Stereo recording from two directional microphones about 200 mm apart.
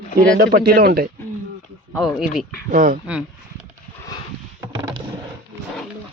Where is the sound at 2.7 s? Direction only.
40° right (ahead or behind).